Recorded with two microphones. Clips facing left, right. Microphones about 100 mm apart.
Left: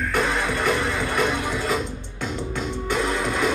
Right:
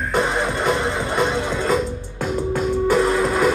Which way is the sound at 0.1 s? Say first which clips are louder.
Right 4 dB; 20° right (ahead or behind).